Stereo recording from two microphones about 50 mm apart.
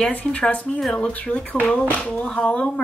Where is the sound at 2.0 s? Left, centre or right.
Left.